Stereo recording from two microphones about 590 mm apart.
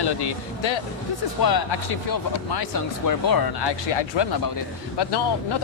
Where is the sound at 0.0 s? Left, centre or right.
Left.